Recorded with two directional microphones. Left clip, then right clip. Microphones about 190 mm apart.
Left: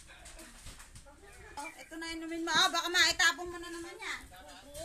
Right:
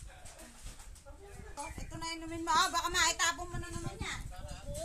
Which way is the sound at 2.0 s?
50° right (ahead or behind).